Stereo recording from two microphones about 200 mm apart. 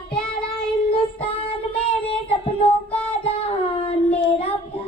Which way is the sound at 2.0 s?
25° left (ahead or behind).